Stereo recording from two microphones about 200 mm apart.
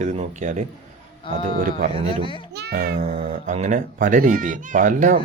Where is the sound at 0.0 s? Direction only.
35° right (ahead or behind).